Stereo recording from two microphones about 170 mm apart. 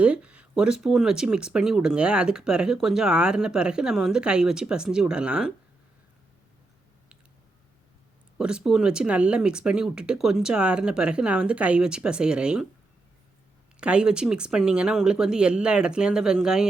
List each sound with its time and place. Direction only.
0.0 s speech: 5° right (ahead or behind)
8.4 s speech: 5° right (ahead or behind)
13.7 s speech: 5° right (ahead or behind)